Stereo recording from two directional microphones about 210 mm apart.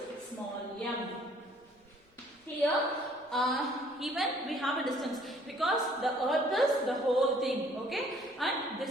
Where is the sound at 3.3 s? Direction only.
Centre (ahead or behind).